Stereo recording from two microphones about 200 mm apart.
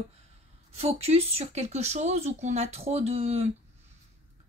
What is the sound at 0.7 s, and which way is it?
Speech, 30° right (ahead or behind).